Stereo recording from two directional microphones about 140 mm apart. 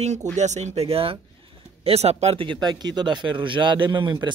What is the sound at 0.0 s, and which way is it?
A man's voice, 55° right (ahead or behind).